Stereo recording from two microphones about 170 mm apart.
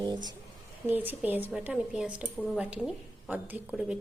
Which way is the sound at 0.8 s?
10° right (ahead or behind).